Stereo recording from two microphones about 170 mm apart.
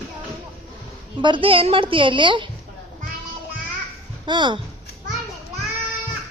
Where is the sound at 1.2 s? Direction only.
30° right (ahead or behind).